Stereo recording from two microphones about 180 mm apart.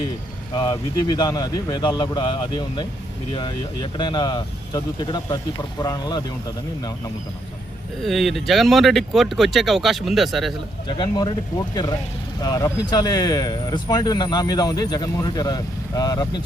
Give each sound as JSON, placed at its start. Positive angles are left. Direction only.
{"t": 0.5, "sound": "speech", "side_deg": 20}
{"t": 3.9, "sound": "speech", "side_deg": 25}
{"t": 8.0, "sound": "speech", "side_deg": 0}
{"t": 10.8, "sound": "speech", "side_deg": 25}